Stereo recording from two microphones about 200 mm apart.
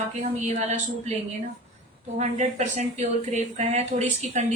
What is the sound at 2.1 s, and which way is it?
Speech, 35° right (ahead or behind).